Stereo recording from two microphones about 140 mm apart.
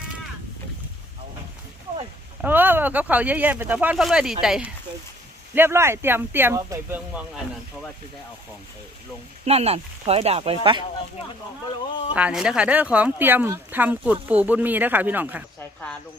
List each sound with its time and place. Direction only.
2.4 s speech: 15° right (ahead or behind)
5.5 s speech: 15° right (ahead or behind)
9.5 s speech: 45° right (ahead or behind)
12.1 s speech: 5° right (ahead or behind)